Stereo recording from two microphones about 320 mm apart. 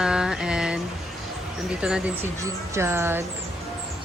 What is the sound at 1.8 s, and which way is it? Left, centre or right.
Speech, centre.